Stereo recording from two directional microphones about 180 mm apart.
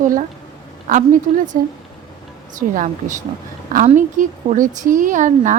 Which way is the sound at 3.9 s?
45° right (ahead or behind).